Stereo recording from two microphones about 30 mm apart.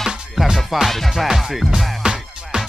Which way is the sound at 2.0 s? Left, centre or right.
Right.